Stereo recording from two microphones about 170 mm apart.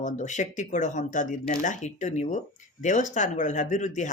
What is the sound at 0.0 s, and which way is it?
Speech, 45° left (ahead or behind).